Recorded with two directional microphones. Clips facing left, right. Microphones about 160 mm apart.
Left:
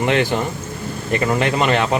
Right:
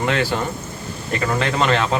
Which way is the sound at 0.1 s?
20° left (ahead or behind).